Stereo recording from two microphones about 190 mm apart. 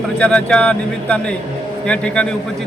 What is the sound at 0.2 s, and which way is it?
A man's voice, 5° left (ahead or behind).